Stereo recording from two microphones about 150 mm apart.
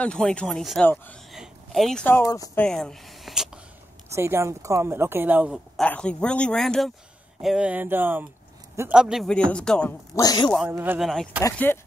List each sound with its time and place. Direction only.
0.0 s a man's voice: 5° left (ahead or behind)
1.3 s a sound: centre (ahead or behind)
2.0 s speech: 20° left (ahead or behind)
2.5 s a man's voice: 5° left (ahead or behind)
4.1 s a woman's voice: 15° right (ahead or behind)
5.8 s a woman's voice: 5° left (ahead or behind)
10.1 s speech: 25° left (ahead or behind)
10.7 s a woman's voice: 15° right (ahead or behind)
11.0 s a man's voice: centre (ahead or behind)
11.5 s speech: 15° left (ahead or behind)